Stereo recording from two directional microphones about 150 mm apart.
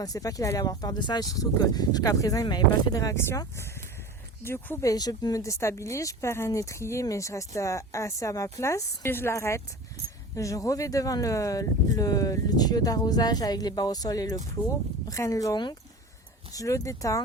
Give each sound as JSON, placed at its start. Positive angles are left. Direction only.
{"t": 0.0, "sound": "speech", "side_deg": 25}
{"t": 4.4, "sound": "speech", "side_deg": 15}